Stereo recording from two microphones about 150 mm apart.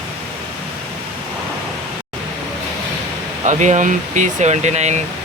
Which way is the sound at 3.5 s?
55° right (ahead or behind).